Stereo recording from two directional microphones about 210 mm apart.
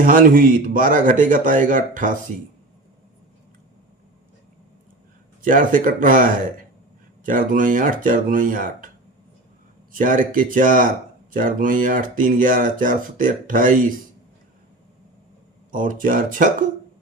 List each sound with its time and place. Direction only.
0.0 s speech: 40° right (ahead or behind)
5.4 s speech: 40° right (ahead or behind)
9.9 s speech: 40° right (ahead or behind)
15.7 s speech: 40° right (ahead or behind)